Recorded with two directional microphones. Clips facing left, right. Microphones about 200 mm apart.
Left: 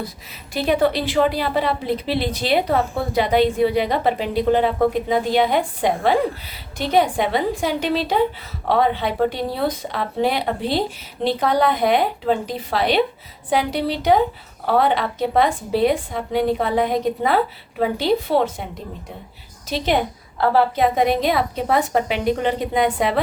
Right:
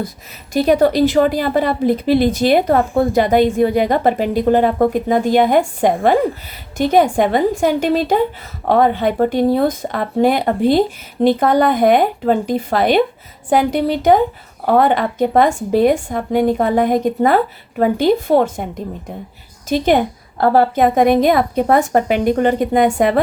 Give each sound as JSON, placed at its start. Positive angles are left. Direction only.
{"t": 0.5, "sound": "a woman's voice", "side_deg": -45}